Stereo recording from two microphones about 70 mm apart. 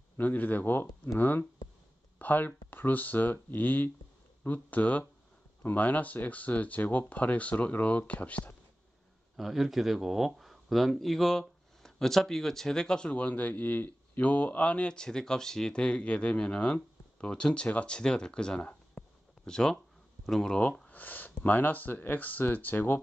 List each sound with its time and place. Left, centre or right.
0.2 s speech: left
9.4 s speech: centre
13.1 s speech: left; by 20.5 s centre
20.9 s speech: left